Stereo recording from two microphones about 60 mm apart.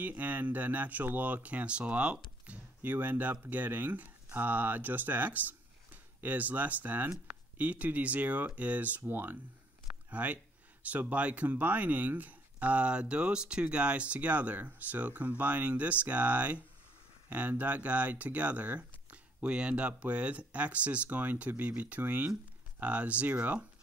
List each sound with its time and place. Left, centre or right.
0.0 s speech: right